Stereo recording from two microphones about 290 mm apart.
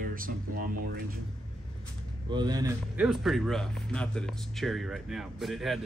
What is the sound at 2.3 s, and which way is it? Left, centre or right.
Speech, centre.